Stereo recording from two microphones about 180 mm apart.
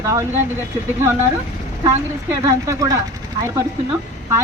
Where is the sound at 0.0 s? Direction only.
15° right (ahead or behind).